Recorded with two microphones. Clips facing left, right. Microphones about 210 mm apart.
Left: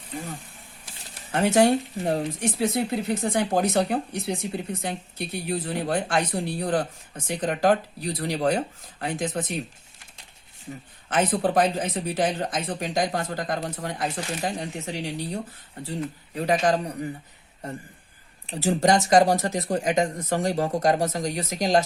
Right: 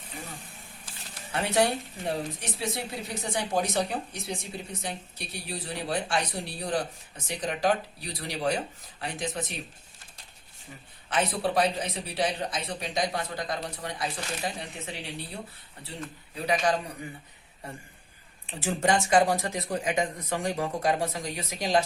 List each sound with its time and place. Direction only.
1.3 s speech: 45° left (ahead or behind)
11.1 s speech: 50° left (ahead or behind)
18.5 s speech: 40° left (ahead or behind)